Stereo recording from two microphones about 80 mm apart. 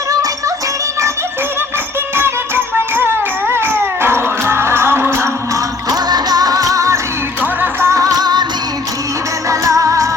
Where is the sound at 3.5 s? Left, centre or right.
Right.